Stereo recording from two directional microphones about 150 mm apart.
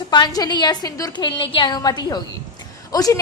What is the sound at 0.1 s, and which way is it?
A woman's voice, 30° left (ahead or behind).